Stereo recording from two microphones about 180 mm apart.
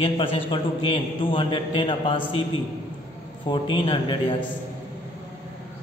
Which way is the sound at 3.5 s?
25° left (ahead or behind).